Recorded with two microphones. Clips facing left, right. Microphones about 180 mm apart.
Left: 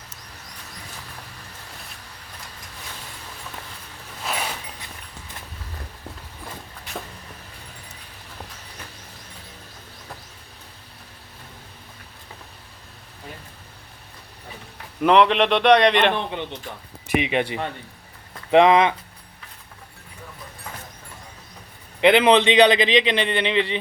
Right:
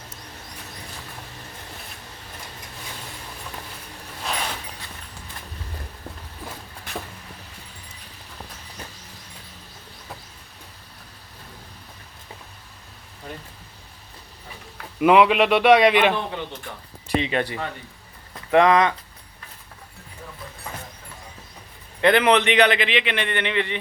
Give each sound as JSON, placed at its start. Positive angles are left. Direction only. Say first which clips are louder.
{"t": 4.2, "sound": "a sound", "louder": "even", "side_deg": 5}
{"t": 15.0, "sound": "speech", "louder": "right 1 dB", "side_deg": -5}
{"t": 17.2, "sound": "speech", "louder": "left 1 dB", "side_deg": 15}
{"t": 22.0, "sound": "speech", "louder": "left 2 dB", "side_deg": 20}